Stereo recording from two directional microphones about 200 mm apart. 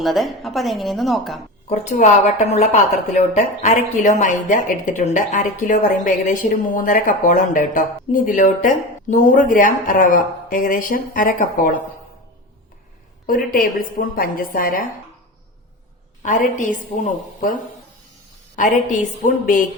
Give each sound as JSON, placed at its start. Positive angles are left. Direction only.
{"t": 0.0, "sound": "a woman's voice", "side_deg": 0}
{"t": 1.7, "sound": "speech", "side_deg": 35}
{"t": 13.2, "sound": "a woman's voice", "side_deg": 45}
{"t": 16.2, "sound": "speech", "side_deg": 40}